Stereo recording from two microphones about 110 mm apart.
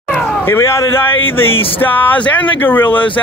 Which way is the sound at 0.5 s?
25° left (ahead or behind).